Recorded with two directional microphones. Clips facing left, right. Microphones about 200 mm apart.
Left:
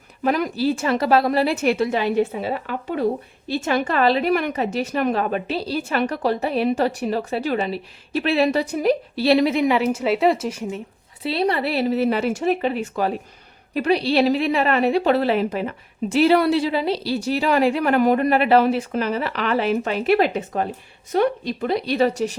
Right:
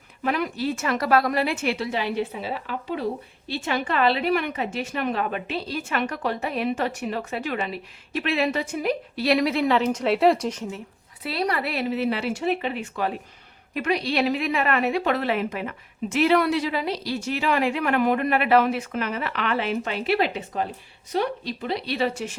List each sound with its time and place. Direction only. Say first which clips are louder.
0.2 s a woman's voice: left 5 dB; 40° left (ahead or behind); by 10.8 s 10° left (ahead or behind)
11.2 s a woman's voice: left 5 dB; 25° left (ahead or behind)